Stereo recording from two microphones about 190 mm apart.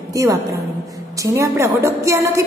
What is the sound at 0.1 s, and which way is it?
A woman's voice, 15° right (ahead or behind).